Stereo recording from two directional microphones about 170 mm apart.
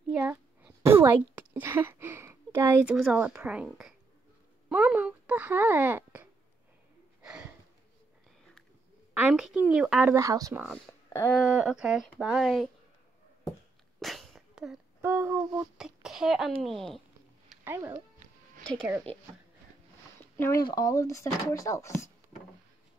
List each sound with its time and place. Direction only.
0.1 s a sound: 5° right (ahead or behind)
1.5 s speech: 10° right (ahead or behind)
7.2 s a sound: 5° right (ahead or behind)
9.1 s speech: 5° right (ahead or behind)
10.1 s speech: 20° right (ahead or behind)
10.9 s a sound: 15° left (ahead or behind)
11.3 s speech: 5° right (ahead or behind)
13.9 s sneeze: centre (ahead or behind)
15.0 s a sound: 15° right (ahead or behind)
15.8 s a child's voice: 5° right (ahead or behind)
17.6 s speech: 15° right (ahead or behind)
20.3 s speech: 15° left (ahead or behind)